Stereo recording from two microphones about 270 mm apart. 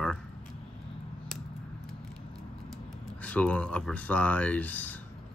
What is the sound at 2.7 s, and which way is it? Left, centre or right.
Speech, centre.